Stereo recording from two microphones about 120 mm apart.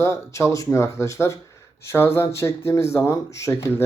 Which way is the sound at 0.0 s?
25° left (ahead or behind).